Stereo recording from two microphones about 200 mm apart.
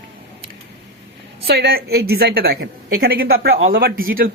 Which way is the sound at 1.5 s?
55° right (ahead or behind).